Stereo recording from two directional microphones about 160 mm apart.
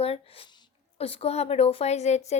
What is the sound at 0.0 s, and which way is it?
A woman's voice, 35° left (ahead or behind).